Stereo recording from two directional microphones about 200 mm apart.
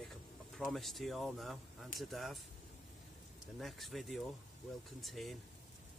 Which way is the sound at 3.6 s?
Centre (ahead or behind).